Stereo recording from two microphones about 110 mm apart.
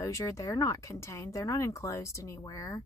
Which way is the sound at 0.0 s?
30° left (ahead or behind).